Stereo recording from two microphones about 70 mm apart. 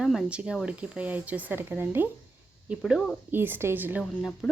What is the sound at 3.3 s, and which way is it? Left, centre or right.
Speech, right.